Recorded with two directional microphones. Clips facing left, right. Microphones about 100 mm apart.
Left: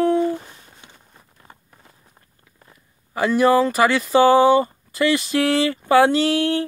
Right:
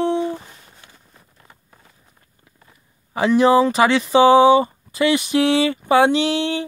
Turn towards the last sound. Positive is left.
turn(degrees=-20)  # may be behind; listen again after turning